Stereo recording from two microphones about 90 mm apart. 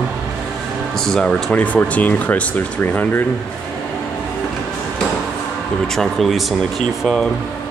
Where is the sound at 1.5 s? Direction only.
15° left (ahead or behind).